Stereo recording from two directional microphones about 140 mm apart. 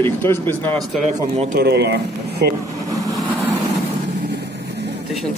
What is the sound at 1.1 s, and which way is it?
Speech, 60° right (ahead or behind).